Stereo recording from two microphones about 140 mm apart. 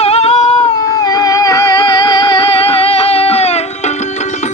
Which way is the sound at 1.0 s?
25° left (ahead or behind).